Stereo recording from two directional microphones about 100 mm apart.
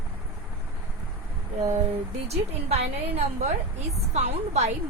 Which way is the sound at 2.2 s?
90° right.